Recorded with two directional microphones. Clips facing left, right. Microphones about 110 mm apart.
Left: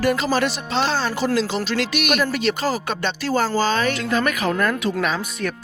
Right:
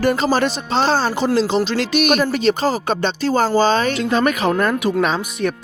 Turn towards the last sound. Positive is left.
turn(degrees=-20)  # may be behind; listen again after turning